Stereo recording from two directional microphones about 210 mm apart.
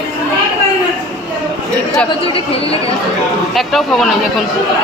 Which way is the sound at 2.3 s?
25° left (ahead or behind).